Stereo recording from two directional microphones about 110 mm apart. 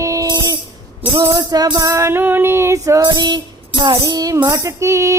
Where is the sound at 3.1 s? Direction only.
40° right (ahead or behind).